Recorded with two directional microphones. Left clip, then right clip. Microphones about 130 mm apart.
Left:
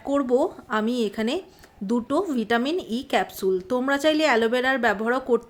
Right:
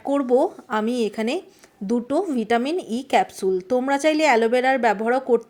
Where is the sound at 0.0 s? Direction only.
20° right (ahead or behind).